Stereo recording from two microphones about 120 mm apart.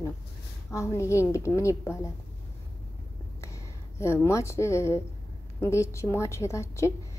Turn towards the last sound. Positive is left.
turn(degrees=25)  # may be behind; listen again after turning